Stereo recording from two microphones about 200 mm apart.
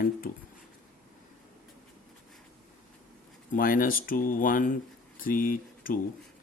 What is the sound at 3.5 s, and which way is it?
A man's voice, 45° left (ahead or behind).